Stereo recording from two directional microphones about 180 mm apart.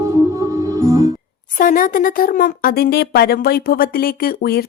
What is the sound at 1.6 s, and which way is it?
A woman's voice, 50° left (ahead or behind).